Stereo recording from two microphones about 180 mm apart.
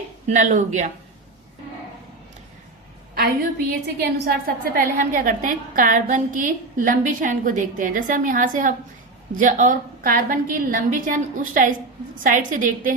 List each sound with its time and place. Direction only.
0.3 s speech: 40° right (ahead or behind)
3.2 s a woman's voice: 60° right (ahead or behind)